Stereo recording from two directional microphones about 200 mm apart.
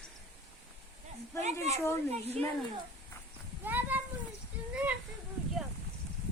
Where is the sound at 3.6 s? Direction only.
10° right (ahead or behind).